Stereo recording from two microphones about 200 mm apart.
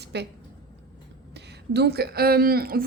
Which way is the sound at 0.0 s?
55° right (ahead or behind).